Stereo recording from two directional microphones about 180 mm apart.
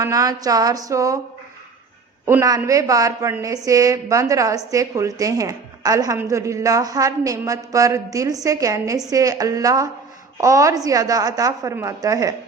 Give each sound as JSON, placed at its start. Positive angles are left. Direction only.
{"t": 0.0, "sound": "a woman's voice", "side_deg": -20}
{"t": 2.2, "sound": "a woman's voice", "side_deg": -15}